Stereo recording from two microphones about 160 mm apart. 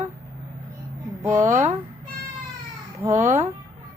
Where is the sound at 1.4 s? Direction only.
50° right (ahead or behind).